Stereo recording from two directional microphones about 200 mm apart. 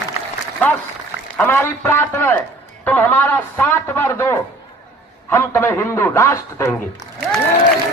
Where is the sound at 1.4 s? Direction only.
10° left (ahead or behind).